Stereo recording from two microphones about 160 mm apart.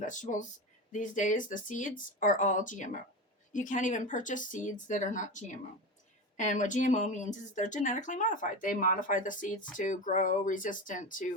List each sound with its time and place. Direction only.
0.0 s speech: 50° left (ahead or behind)